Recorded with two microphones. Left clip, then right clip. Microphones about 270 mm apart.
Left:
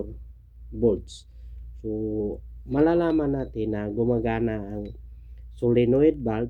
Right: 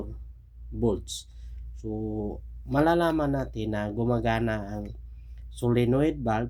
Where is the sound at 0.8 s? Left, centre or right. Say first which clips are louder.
Left 5 dB; centre.